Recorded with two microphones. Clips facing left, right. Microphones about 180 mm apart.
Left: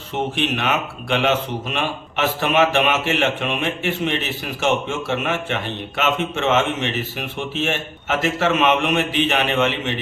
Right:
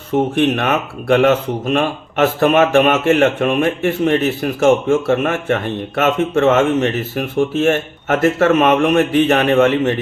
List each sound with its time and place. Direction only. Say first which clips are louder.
0.3 s speech: right 6 dB; 50° right (ahead or behind)